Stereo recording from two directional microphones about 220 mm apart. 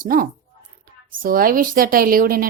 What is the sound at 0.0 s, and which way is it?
A woman's voice, 40° right (ahead or behind).